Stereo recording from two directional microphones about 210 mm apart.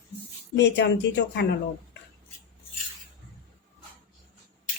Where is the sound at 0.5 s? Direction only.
55° left (ahead or behind).